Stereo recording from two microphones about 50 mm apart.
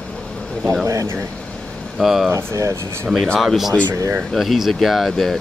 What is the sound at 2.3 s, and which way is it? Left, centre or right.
Speech, right.